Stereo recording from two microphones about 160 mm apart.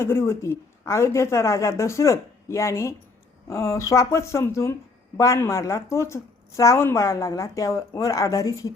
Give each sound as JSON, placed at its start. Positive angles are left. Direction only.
{"t": 0.0, "sound": "a woman's voice", "side_deg": 15}